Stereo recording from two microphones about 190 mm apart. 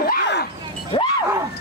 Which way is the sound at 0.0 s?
60° left (ahead or behind).